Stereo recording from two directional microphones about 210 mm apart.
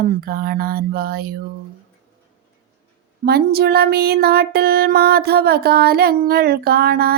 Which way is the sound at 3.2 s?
50° right (ahead or behind).